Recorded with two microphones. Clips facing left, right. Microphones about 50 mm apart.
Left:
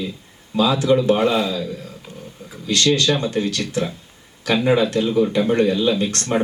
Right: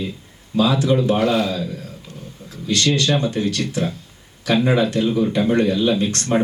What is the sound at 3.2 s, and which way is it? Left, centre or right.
Speech, left.